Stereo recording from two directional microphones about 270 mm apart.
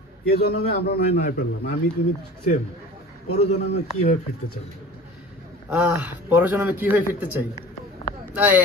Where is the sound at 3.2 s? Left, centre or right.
Left.